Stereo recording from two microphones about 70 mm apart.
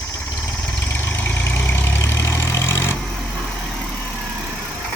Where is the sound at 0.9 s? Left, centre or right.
Left.